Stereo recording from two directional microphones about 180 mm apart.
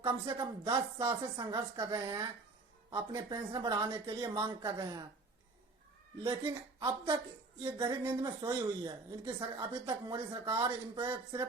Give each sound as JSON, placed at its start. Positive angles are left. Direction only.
{"t": 0.3, "sound": "a woman's voice", "side_deg": -25}
{"t": 6.4, "sound": "a woman's voice", "side_deg": -15}